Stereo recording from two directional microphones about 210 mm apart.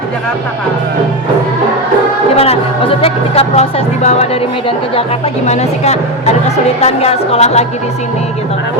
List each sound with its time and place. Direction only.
2.3 s speech: 30° left (ahead or behind)
5.5 s speech: 30° left (ahead or behind)